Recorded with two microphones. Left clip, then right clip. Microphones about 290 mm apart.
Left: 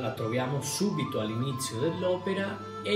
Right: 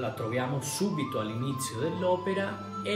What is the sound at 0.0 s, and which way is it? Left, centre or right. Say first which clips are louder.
Speech: left 1 dB; centre.